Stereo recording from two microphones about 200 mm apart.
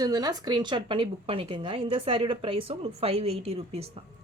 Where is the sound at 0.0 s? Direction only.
20° right (ahead or behind).